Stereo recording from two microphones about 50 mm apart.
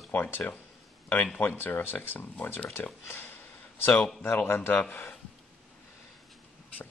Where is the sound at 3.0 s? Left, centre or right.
Left.